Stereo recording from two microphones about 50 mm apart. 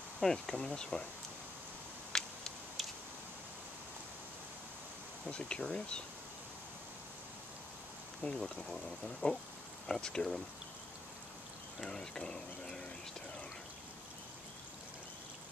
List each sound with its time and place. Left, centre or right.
0.2 s speech: centre
2.1 s a sound: centre
2.8 s a sound: centre
5.3 s speech: centre
8.2 s speech: centre
11.8 s speech: centre